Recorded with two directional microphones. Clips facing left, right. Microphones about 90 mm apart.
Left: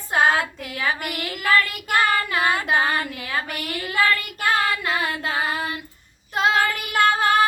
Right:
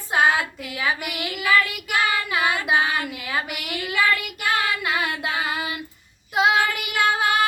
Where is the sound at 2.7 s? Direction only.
40° left (ahead or behind).